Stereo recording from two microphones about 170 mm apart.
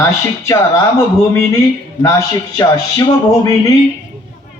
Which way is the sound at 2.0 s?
20° left (ahead or behind).